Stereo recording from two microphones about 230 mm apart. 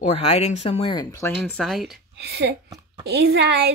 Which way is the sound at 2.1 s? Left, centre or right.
Right.